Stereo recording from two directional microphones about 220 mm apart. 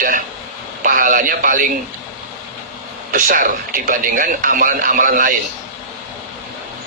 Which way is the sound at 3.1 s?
40° right (ahead or behind).